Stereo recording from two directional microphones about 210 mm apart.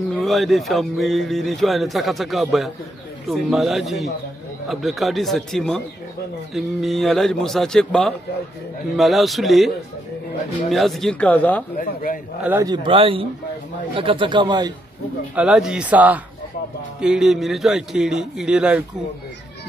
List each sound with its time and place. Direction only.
0.2 s speech: centre (ahead or behind)
10.7 s speech: centre (ahead or behind)
11.7 s a man's voice: 40° left (ahead or behind)
12.4 s speech: 15° right (ahead or behind)
15.3 s speech: 5° right (ahead or behind)